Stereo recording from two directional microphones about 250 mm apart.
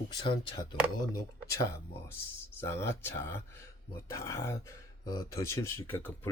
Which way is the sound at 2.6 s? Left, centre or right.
Centre.